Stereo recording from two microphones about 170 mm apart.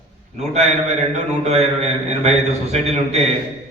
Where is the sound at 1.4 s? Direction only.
40° right (ahead or behind).